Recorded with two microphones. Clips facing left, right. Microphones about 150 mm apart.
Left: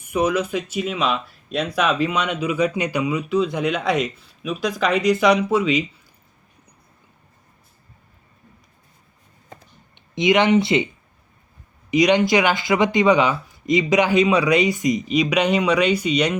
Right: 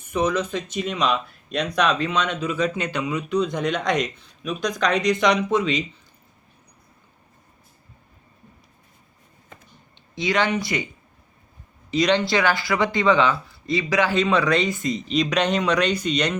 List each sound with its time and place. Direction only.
0.0 s speech: 10° left (ahead or behind)
10.2 s speech: 20° left (ahead or behind)
11.9 s speech: 15° left (ahead or behind)